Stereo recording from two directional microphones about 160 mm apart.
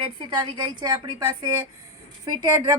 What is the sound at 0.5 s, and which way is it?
Speech, 30° right (ahead or behind).